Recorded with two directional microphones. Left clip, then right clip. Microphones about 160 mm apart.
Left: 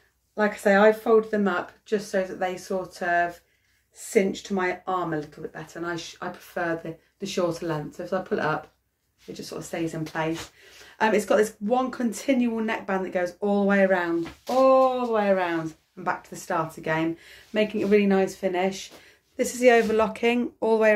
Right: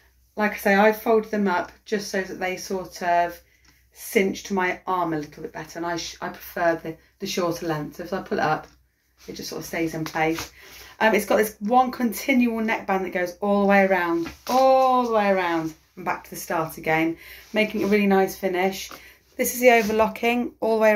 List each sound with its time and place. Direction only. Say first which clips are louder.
0.4 s speech: even; 25° left (ahead or behind)
7.2 s speech: right 1 dB; 30° left (ahead or behind); by 20.9 s 50° left (ahead or behind)